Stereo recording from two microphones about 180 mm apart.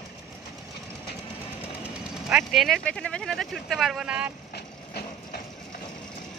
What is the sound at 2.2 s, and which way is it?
Speech, centre (ahead or behind).